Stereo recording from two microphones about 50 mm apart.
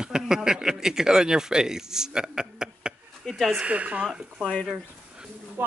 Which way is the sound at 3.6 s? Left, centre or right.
Right.